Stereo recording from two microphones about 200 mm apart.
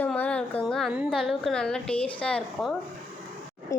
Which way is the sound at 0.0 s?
5° left (ahead or behind).